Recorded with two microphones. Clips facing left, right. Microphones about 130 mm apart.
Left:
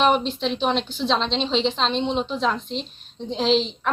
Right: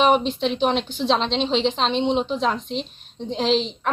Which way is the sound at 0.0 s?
5° right (ahead or behind).